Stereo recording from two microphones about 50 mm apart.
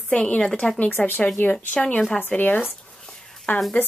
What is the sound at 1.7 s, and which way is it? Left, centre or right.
Speech, left.